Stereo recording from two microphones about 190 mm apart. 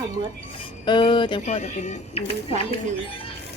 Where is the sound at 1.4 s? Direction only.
35° left (ahead or behind).